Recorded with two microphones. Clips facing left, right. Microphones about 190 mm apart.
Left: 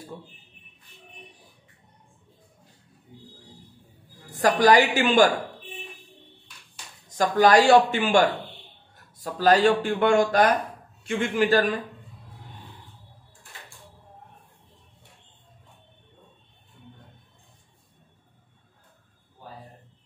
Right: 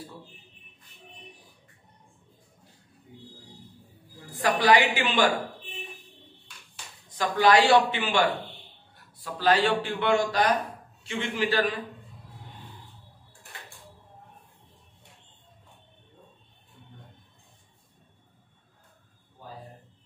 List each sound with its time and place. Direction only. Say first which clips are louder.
4.3 s speech: left 3 dB; 45° left (ahead or behind)
7.2 s speech: left 3 dB; 45° left (ahead or behind)